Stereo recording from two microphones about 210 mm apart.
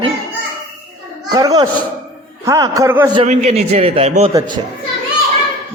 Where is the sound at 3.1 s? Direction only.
30° right (ahead or behind).